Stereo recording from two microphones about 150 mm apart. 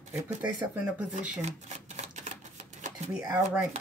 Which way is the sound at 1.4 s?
50° right (ahead or behind).